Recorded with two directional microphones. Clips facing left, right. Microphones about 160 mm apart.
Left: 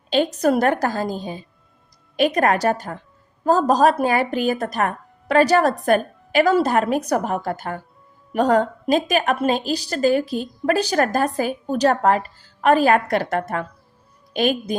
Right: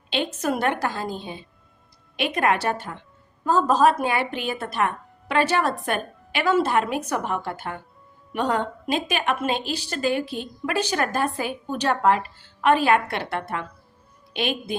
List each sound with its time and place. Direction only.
0.1 s a woman's voice: 40° left (ahead or behind)